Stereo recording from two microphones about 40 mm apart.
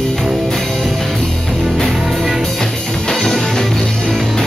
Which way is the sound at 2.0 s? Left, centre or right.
Centre.